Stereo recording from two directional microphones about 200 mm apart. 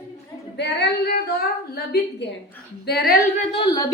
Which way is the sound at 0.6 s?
55° left (ahead or behind).